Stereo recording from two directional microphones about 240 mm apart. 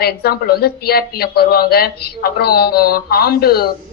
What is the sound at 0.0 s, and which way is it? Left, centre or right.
A woman's voice, left.